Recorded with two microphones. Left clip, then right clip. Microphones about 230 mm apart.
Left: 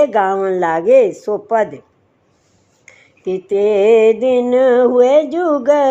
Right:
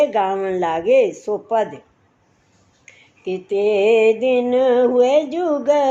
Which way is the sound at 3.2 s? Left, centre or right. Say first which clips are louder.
Left 4 dB; left.